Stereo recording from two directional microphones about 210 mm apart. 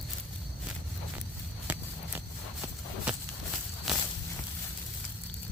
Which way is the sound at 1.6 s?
10° right (ahead or behind).